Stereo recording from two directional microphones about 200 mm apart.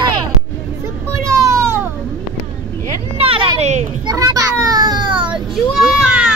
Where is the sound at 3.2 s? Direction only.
30° right (ahead or behind).